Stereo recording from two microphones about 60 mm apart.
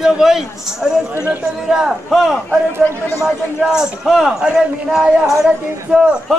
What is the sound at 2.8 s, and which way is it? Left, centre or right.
Speech, left.